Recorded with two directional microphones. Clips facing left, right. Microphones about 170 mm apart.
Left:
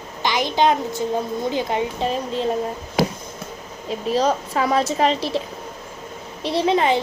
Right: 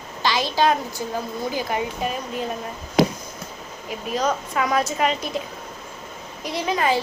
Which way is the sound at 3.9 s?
30° left (ahead or behind).